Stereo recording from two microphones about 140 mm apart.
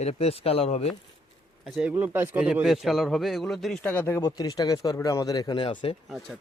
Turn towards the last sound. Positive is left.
turn(degrees=40)  # may be behind; listen again after turning